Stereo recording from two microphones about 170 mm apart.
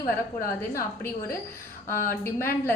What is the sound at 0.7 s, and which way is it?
A woman's voice, 15° left (ahead or behind).